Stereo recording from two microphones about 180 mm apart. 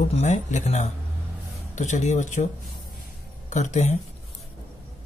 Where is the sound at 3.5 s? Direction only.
40° left (ahead or behind).